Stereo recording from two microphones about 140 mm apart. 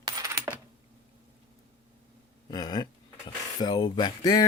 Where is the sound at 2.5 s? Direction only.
30° left (ahead or behind).